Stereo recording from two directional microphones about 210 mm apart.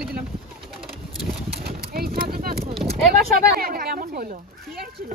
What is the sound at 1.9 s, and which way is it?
Speech, 45° right (ahead or behind).